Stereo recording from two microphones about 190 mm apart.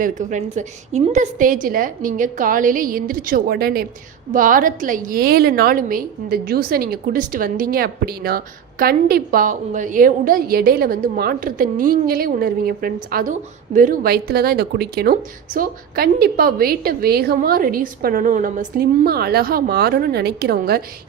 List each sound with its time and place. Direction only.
0.0 s a woman's voice: 40° right (ahead or behind)